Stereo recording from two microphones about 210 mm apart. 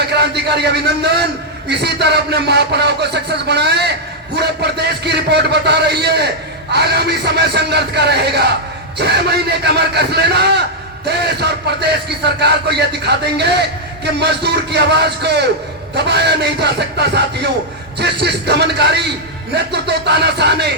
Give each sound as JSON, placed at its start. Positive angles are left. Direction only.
{"t": 0.1, "sound": "a man's voice", "side_deg": -50}